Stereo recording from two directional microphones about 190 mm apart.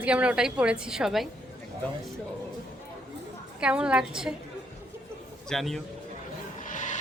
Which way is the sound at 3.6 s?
5° right (ahead or behind).